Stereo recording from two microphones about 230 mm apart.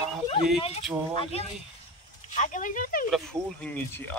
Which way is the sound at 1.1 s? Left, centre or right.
Left.